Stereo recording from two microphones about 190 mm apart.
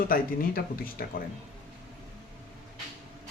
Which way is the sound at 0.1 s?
50° left (ahead or behind).